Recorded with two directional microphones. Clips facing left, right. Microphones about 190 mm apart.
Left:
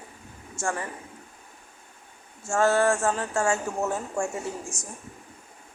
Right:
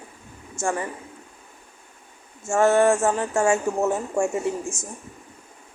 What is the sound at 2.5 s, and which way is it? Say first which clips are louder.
A woman's voice: right 4 dB; 20° right (ahead or behind).